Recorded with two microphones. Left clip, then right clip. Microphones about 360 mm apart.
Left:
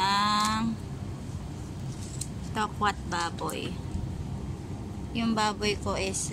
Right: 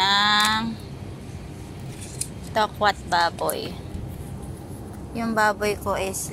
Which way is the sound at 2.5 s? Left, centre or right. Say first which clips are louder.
Right 7 dB; centre.